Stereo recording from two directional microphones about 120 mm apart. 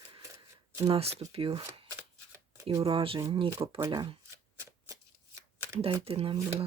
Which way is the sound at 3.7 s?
30° right (ahead or behind).